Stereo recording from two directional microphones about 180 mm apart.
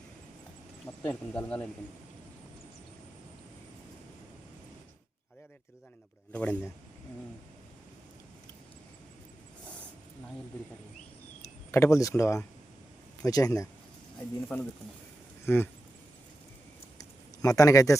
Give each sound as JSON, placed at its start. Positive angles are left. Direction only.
{"t": 1.0, "sound": "speech", "side_deg": 10}
{"t": 6.3, "sound": "speech", "side_deg": 10}
{"t": 11.7, "sound": "speech", "side_deg": 15}
{"t": 17.0, "sound": "a sound", "side_deg": 20}